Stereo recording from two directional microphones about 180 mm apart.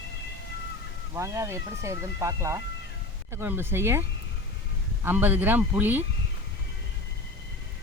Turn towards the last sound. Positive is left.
turn(degrees=-10)  # may be behind; listen again after turning